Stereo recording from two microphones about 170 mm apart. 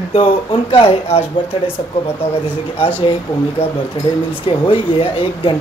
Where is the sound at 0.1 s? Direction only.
30° left (ahead or behind).